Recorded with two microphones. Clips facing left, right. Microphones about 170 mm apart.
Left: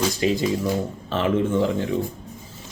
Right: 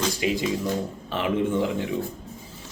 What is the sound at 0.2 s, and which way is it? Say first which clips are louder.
Speech: left 3 dB; 10° right (ahead or behind).